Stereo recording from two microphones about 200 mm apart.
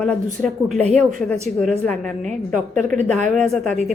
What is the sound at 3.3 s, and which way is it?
Speech, centre (ahead or behind).